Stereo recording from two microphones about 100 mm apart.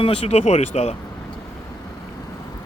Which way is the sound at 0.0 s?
70° left (ahead or behind).